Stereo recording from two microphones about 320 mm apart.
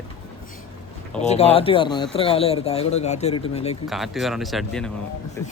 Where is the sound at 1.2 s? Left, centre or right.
Centre.